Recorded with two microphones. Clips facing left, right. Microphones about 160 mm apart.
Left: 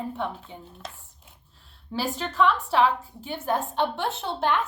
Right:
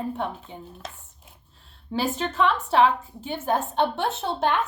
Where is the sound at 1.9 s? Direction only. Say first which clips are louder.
Right 3 dB; 20° right (ahead or behind).